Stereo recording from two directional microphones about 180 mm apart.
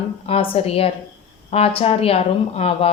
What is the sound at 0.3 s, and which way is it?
Speech, 30° left (ahead or behind).